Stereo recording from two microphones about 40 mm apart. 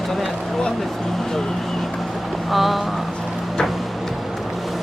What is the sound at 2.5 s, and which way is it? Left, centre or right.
Speech, centre.